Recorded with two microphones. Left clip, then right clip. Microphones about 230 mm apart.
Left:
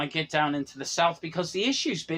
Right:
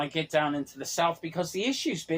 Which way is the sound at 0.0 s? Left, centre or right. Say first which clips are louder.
Left 1 dB; left.